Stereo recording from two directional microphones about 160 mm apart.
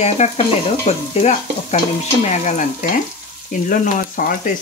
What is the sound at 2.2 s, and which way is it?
Speech, 45° left (ahead or behind).